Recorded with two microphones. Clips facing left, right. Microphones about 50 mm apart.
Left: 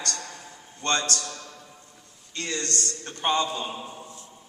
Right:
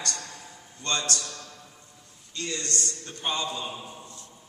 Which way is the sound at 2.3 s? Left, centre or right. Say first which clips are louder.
Left 2 dB; left.